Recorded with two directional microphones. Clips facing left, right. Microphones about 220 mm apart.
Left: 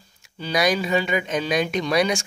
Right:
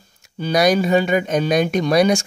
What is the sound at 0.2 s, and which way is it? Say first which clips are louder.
Speech: right 5 dB; 45° right (ahead or behind).